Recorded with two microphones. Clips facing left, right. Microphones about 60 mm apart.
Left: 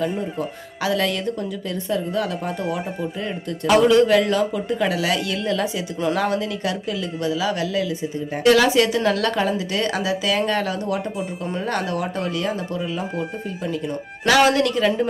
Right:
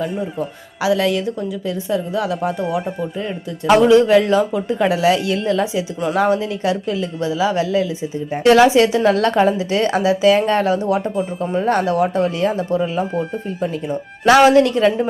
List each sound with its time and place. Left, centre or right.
0.0 s a woman's voice: centre
3.8 s speech: right
14.3 s speech: right